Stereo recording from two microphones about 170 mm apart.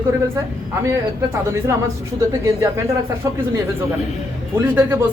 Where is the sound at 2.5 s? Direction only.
20° right (ahead or behind).